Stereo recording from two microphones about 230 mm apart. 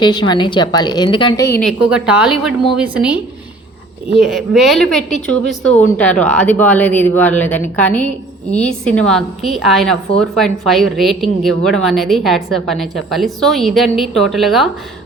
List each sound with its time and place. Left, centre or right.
0.0 s a woman's voice: centre
1.9 s speech: centre
4.2 s speech: centre